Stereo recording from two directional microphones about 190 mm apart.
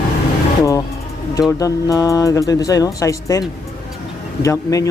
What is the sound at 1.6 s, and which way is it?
Speech, 15° left (ahead or behind).